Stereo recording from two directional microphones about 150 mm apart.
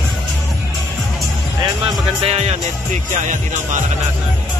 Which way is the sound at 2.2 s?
45° right (ahead or behind).